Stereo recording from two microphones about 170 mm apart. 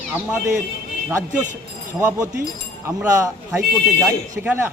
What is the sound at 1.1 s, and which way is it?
Speech, 15° right (ahead or behind).